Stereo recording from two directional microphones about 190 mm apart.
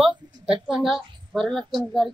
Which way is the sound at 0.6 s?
5° right (ahead or behind).